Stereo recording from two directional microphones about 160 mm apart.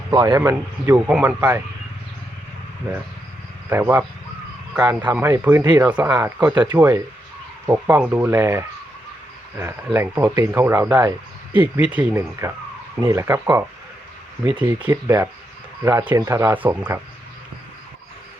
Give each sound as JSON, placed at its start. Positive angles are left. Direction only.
{"t": 0.1, "sound": "speech", "side_deg": -25}
{"t": 0.5, "sound": "speech", "side_deg": -10}
{"t": 3.7, "sound": "speech", "side_deg": -15}